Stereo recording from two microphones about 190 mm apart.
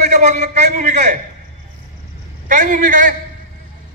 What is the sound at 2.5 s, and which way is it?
Speech, 40° right (ahead or behind).